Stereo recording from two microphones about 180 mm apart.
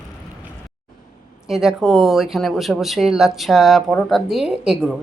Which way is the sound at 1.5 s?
Centre (ahead or behind).